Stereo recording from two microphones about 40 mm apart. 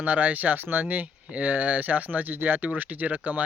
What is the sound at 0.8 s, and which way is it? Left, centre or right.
Speech, right.